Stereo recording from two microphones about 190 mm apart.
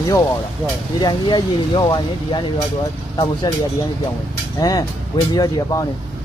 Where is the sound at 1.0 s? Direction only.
20° left (ahead or behind).